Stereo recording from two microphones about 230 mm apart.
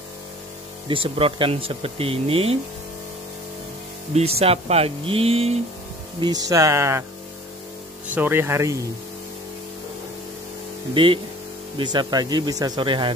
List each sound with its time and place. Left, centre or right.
0.8 s speech: right
4.1 s speech: right
8.1 s speech: centre
11.8 s speech: centre